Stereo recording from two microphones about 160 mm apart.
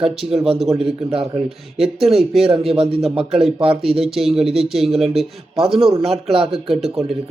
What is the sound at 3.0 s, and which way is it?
Speech, centre (ahead or behind).